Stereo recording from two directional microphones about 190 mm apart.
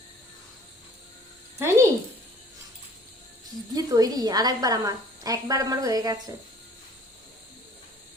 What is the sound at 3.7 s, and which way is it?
A woman's voice, 20° right (ahead or behind).